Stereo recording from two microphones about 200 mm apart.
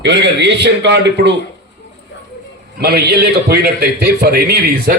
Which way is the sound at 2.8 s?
55° right (ahead or behind).